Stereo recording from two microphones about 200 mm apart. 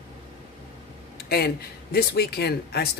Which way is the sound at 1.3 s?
50° left (ahead or behind).